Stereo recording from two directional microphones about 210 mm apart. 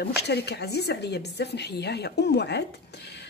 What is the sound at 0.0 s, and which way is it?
Speech, 50° left (ahead or behind).